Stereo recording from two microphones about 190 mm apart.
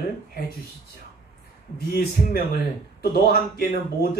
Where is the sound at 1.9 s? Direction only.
50° left (ahead or behind).